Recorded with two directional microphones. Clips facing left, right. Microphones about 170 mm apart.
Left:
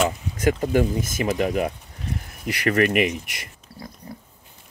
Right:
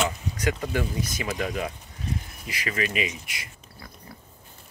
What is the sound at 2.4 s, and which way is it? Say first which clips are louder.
Speech: left 10 dB; 65° left (ahead or behind).